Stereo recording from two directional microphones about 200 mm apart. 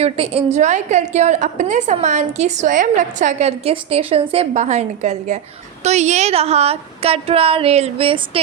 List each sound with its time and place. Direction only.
0.0 s a woman's voice: 30° right (ahead or behind)